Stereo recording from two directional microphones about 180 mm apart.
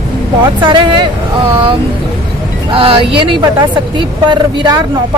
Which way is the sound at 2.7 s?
30° right (ahead or behind).